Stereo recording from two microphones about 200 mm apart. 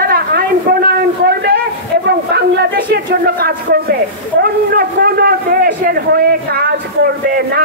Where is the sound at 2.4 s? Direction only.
50° right (ahead or behind).